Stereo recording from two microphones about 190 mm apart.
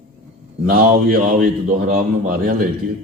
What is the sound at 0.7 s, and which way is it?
A man's voice, 50° right (ahead or behind).